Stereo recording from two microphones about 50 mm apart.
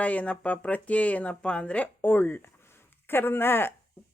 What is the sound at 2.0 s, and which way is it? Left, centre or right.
Speech, left.